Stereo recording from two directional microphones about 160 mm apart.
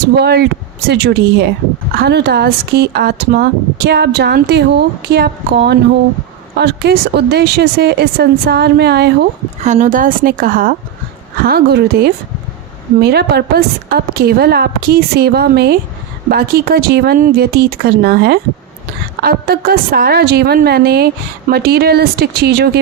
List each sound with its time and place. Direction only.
0.2 s speech: 90° right
9.6 s a woman's voice: 50° right (ahead or behind)
11.4 s a woman's voice: 75° right (ahead or behind)
13.0 s a woman's voice: 90° right
16.3 s a woman's voice: 70° right (ahead or behind); by 18.3 s 90° right
19.2 s a woman's voice: 70° right (ahead or behind); by 22.8 s 90° right